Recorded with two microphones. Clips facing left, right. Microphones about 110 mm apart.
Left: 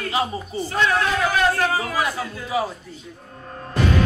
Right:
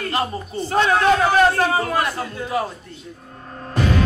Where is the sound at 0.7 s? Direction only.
35° right (ahead or behind).